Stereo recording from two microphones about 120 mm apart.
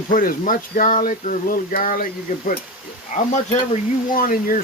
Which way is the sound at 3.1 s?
90° left.